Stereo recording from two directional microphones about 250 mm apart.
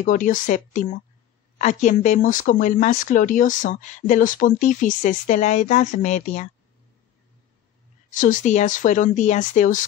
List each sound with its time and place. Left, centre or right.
0.0 s speech: left
8.1 s speech: left